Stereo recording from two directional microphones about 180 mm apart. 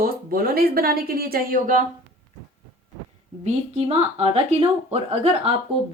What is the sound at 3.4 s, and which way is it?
A woman's voice, 35° right (ahead or behind).